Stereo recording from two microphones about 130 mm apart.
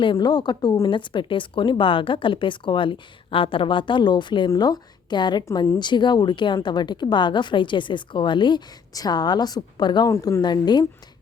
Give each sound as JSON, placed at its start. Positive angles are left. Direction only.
{"t": 0.0, "sound": "a woman's voice", "side_deg": 35}
{"t": 10.1, "sound": "a woman's voice", "side_deg": 25}